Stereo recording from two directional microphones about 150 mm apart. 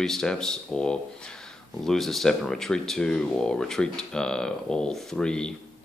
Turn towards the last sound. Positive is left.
turn(degrees=5)  # may be behind; listen again after turning